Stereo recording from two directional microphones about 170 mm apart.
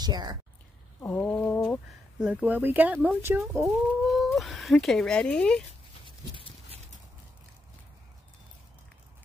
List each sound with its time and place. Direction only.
0.0 s speech: 25° right (ahead or behind)
1.0 s a sound: 10° left (ahead or behind)
2.1 s speech: 5° right (ahead or behind)
3.7 s speech: centre (ahead or behind)